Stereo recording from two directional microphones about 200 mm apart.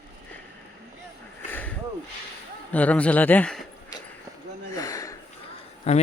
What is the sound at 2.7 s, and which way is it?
Speech, 5° left (ahead or behind).